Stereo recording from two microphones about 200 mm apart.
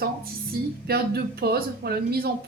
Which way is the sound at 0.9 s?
50° right (ahead or behind).